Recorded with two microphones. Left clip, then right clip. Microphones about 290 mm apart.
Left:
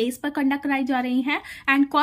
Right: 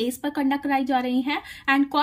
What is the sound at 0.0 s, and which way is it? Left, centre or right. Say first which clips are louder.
Speech: left 1 dB; centre.